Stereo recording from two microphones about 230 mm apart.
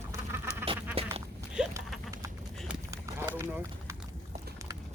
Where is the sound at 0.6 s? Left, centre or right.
Centre.